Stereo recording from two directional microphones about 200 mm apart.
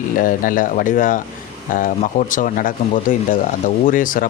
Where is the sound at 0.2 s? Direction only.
45° left (ahead or behind).